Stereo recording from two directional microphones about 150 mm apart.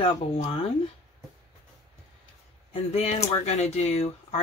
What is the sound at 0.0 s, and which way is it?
Speech, 40° left (ahead or behind).